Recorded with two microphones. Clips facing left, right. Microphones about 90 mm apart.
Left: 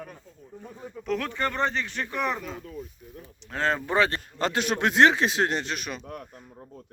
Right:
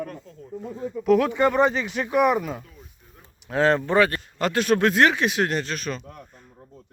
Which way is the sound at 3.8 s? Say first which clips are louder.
Right 4 dB; 20° left (ahead or behind).